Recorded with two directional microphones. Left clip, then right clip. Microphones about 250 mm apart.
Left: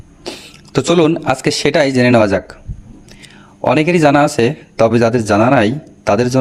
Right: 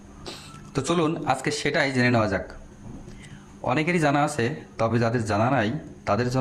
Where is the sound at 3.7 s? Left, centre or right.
Left.